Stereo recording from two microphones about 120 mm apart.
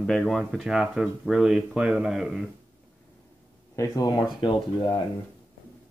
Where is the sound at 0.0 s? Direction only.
5° left (ahead or behind).